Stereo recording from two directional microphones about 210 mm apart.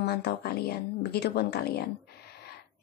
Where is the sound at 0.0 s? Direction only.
50° left (ahead or behind).